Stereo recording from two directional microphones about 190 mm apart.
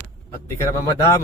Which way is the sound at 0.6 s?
15° left (ahead or behind).